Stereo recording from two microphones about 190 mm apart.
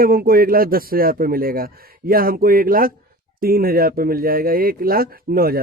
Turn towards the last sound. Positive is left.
turn(degrees=-50)  # may be behind; listen again after turning